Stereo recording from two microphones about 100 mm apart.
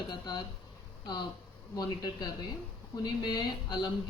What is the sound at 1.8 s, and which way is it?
A woman's voice, 40° left (ahead or behind).